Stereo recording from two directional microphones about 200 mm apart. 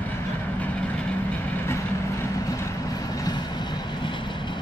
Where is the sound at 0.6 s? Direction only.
5° left (ahead or behind).